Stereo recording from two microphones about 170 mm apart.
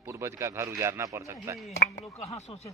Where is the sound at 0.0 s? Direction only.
15° right (ahead or behind).